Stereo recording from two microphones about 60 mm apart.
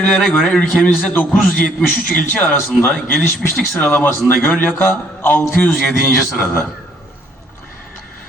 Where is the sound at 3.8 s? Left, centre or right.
Left.